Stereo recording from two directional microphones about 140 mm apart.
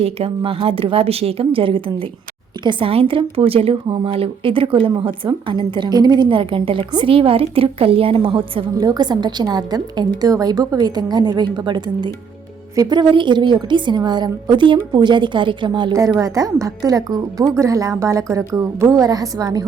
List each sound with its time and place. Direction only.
0.0 s a woman's voice: 45° right (ahead or behind)
16.0 s a woman's voice: 25° right (ahead or behind)